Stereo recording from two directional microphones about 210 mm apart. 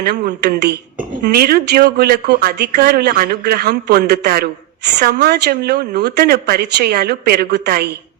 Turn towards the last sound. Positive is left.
turn(degrees=-50)  # may be behind; listen again after turning